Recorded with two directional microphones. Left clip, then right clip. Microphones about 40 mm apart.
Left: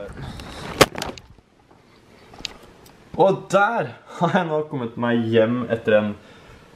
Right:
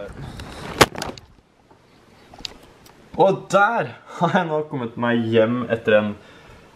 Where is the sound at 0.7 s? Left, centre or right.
Centre.